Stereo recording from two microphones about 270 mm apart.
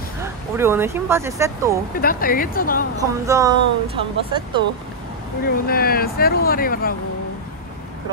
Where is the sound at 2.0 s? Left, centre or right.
Left.